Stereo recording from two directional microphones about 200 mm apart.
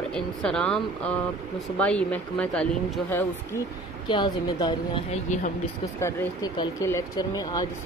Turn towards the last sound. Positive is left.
turn(degrees=20)  # may be behind; listen again after turning